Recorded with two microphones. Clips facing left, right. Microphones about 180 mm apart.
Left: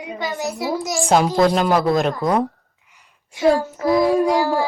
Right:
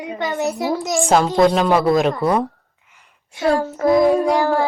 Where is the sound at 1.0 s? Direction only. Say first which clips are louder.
Right 1 dB; centre (ahead or behind).